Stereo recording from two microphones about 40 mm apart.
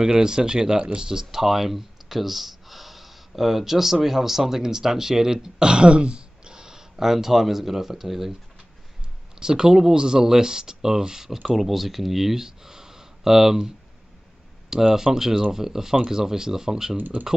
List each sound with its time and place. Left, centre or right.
0.0 s speech: centre
9.4 s speech: centre
14.7 s speech: centre
16.9 s speech: right